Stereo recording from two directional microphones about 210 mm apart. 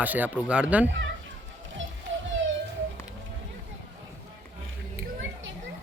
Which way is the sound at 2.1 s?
65° right (ahead or behind).